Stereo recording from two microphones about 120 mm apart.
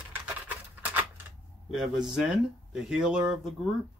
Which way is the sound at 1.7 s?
5° right (ahead or behind).